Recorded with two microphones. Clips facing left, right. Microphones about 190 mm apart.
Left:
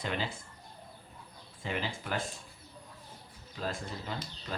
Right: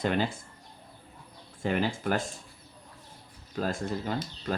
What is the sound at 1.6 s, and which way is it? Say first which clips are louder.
Speech: right 8 dB; 50° right (ahead or behind).